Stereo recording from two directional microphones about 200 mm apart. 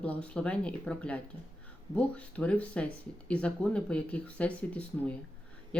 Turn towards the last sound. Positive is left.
turn(degrees=5)  # may be behind; listen again after turning